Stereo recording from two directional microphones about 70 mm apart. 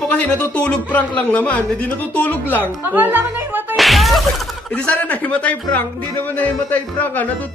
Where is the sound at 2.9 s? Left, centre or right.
Right.